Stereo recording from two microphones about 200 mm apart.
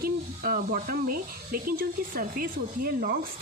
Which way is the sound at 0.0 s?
45° right (ahead or behind).